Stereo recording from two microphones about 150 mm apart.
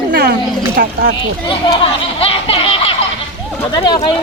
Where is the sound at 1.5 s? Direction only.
35° left (ahead or behind).